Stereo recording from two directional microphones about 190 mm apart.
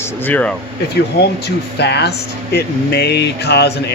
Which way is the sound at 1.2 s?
60° left (ahead or behind).